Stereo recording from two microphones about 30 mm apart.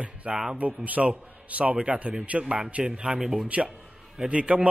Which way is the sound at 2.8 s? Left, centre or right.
Right.